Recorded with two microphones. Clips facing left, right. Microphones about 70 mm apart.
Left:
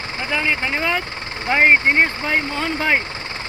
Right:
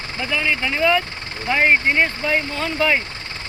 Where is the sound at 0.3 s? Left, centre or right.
Left.